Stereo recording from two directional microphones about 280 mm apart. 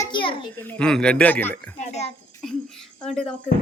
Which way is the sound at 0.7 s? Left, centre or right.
Centre.